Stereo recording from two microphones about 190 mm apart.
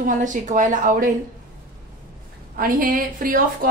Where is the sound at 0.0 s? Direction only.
45° right (ahead or behind).